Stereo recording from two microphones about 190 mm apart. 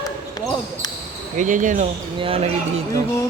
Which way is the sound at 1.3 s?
40° right (ahead or behind).